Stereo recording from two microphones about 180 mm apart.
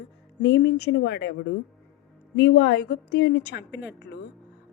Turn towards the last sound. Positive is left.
turn(degrees=75)  # may be behind; listen again after turning